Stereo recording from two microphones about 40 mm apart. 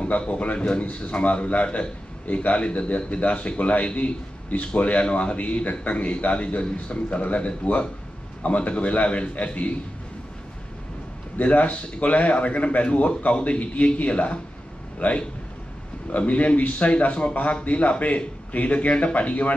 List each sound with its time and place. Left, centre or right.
0.0 s a man's voice: left
11.3 s a man's voice: left